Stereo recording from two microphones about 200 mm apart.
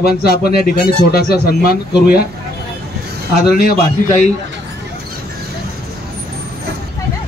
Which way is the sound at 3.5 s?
45° left (ahead or behind).